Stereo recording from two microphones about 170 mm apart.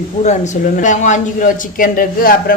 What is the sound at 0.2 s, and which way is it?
Speech, 45° left (ahead or behind).